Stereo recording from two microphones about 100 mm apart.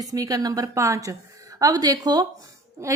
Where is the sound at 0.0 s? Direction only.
40° right (ahead or behind).